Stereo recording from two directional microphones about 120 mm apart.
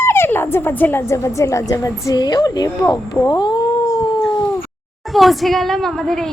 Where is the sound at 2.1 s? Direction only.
35° left (ahead or behind).